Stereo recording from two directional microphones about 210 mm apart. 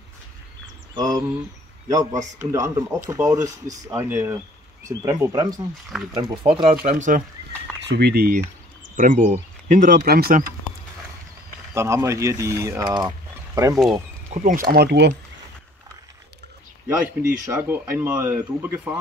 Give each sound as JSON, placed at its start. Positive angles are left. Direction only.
{"t": 0.9, "sound": "speech", "side_deg": -15}
{"t": 6.6, "sound": "speech", "side_deg": -35}
{"t": 7.9, "sound": "speech", "side_deg": -50}
{"t": 11.7, "sound": "speech", "side_deg": -15}
{"t": 14.3, "sound": "speech", "side_deg": -40}
{"t": 16.8, "sound": "speech", "side_deg": -15}